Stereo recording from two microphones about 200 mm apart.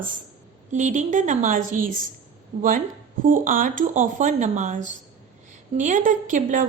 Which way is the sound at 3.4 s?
40° right (ahead or behind).